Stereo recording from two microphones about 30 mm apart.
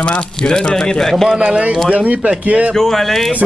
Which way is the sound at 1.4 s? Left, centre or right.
Right.